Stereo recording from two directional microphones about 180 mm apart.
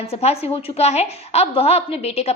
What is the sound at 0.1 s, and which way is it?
A woman's voice, 35° left (ahead or behind).